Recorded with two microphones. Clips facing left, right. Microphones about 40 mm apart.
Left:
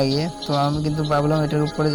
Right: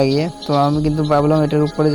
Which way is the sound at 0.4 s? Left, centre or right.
Centre.